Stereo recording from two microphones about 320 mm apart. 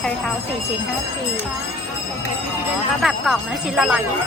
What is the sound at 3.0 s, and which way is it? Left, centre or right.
Speech, centre.